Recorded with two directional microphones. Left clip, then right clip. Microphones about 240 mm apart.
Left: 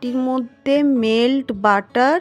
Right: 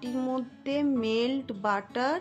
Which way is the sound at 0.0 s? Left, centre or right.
Left.